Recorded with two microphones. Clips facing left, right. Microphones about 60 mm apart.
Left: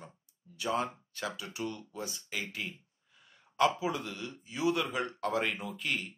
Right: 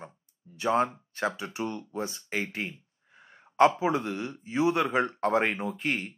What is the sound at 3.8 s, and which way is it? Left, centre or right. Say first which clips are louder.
Speech: right 7 dB; right.